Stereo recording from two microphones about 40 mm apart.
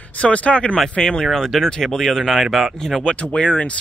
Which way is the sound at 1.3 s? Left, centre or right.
Centre.